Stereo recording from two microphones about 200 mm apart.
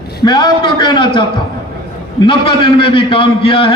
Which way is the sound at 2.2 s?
25° left (ahead or behind).